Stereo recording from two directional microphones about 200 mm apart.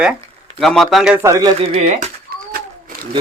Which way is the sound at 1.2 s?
15° right (ahead or behind).